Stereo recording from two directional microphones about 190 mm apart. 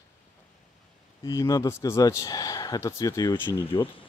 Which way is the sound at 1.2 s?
20° left (ahead or behind).